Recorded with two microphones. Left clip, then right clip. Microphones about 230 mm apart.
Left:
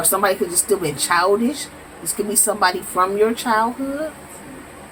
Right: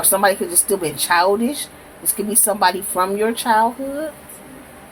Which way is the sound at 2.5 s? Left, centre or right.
Right.